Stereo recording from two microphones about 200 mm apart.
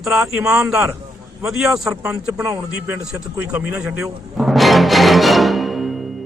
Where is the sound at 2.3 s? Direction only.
15° right (ahead or behind).